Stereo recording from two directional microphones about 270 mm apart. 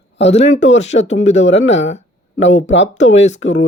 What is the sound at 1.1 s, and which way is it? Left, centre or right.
Speech, left.